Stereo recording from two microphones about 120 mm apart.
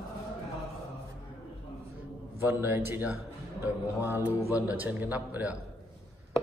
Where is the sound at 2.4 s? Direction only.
20° right (ahead or behind).